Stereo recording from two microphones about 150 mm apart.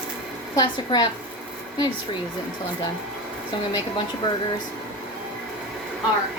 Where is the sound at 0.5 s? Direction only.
30° left (ahead or behind).